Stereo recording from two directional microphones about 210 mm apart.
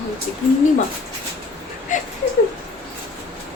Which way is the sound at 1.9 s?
35° left (ahead or behind).